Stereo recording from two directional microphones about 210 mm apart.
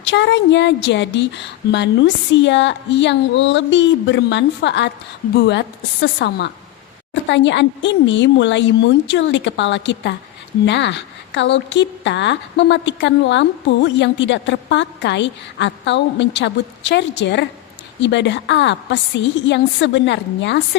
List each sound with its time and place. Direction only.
0.0 s a woman's voice: 55° left (ahead or behind)